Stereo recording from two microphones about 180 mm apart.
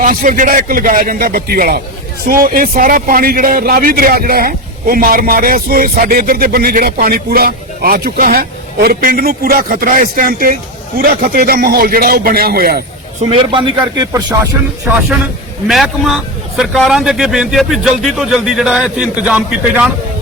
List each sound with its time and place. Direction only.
0.0 s a man's voice: 50° right (ahead or behind)
13.2 s speech: 30° right (ahead or behind)
15.6 s a man's voice: centre (ahead or behind)